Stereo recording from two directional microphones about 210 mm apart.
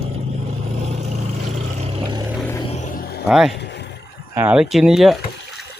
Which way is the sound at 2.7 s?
35° left (ahead or behind).